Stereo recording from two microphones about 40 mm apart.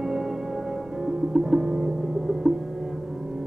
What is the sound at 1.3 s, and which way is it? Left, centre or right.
Music, centre.